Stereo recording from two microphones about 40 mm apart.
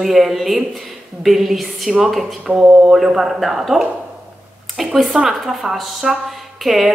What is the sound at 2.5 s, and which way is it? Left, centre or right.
Mantra, right.